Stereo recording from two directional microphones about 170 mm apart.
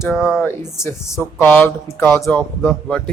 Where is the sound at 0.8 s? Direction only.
15° left (ahead or behind).